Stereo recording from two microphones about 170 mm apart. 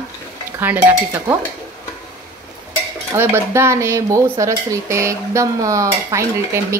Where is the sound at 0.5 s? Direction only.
10° right (ahead or behind).